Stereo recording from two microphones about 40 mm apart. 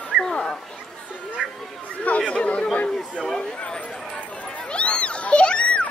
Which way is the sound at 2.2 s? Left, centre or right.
Left.